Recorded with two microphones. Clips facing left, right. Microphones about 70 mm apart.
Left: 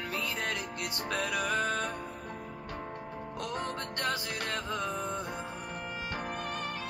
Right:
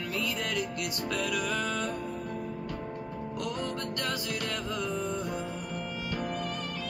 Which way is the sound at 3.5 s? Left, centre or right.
Left.